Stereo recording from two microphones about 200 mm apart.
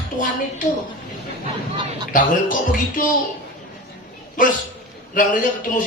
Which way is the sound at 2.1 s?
40° left (ahead or behind).